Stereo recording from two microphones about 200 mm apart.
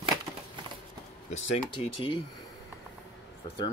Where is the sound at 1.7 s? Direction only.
25° left (ahead or behind).